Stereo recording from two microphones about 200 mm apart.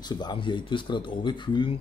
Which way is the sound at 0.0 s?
20° left (ahead or behind).